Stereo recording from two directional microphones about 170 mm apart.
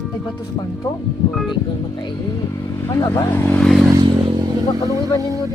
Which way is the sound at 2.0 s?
25° left (ahead or behind).